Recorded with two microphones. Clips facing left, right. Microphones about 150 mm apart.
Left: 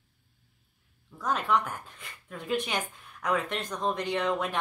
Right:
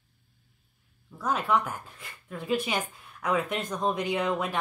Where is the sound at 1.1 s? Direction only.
5° right (ahead or behind).